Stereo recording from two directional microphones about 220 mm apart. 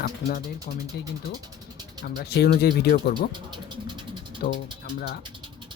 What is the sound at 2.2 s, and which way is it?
Speech, 45° left (ahead or behind).